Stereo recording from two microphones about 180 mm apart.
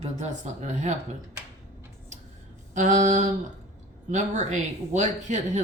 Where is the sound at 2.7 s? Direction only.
40° right (ahead or behind).